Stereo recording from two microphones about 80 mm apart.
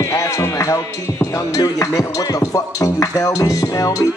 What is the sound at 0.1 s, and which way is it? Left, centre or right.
Music, left.